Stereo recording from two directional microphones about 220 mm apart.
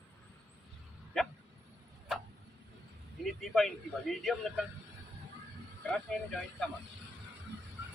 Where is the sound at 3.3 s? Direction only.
Centre (ahead or behind).